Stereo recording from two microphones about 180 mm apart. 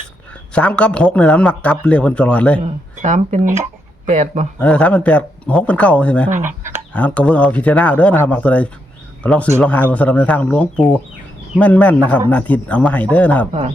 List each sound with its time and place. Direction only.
0.5 s a man's voice: 5° left (ahead or behind)
2.6 s speech: 40° right (ahead or behind)
4.6 s a man's voice: 5° left (ahead or behind)
6.3 s speech: 45° right (ahead or behind)
6.9 s a man's voice: 5° left (ahead or behind)